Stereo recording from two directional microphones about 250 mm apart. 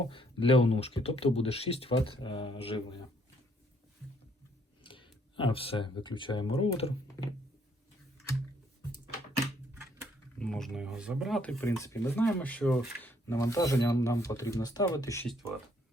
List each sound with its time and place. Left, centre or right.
0.0 s speech: left
4.8 s speech: centre
10.3 s speech: centre